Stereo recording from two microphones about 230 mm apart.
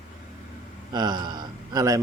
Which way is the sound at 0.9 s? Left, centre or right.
Centre.